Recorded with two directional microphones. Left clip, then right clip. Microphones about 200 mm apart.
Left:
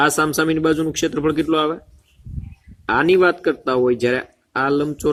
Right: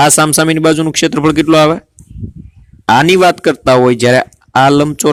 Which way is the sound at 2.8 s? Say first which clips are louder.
Right 8 dB; 50° right (ahead or behind).